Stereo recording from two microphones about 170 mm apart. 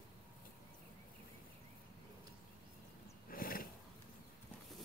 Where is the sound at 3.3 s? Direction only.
60° left (ahead or behind).